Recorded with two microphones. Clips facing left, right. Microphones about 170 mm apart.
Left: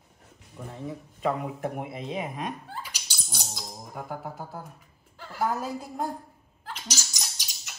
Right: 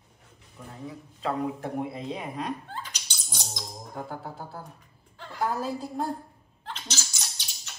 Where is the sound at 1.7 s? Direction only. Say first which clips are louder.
Right 1 dB; 15° left (ahead or behind).